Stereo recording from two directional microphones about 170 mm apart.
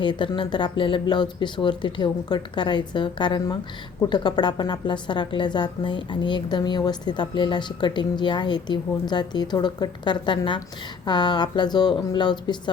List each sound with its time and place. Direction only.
0.0 s a woman's voice: 30° left (ahead or behind)